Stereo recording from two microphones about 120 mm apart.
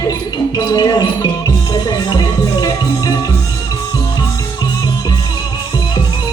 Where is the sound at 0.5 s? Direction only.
35° left (ahead or behind).